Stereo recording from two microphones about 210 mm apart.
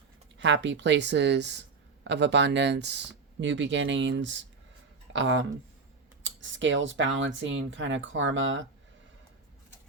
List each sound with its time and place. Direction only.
0.3 s speech: 60° right (ahead or behind)